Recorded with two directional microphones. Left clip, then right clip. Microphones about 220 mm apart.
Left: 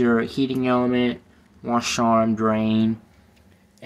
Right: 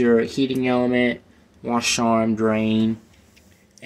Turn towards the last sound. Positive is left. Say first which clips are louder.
# even
turn(degrees=10)  # may be behind; listen again after turning